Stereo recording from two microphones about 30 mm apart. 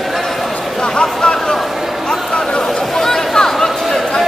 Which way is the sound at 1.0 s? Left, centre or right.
Left.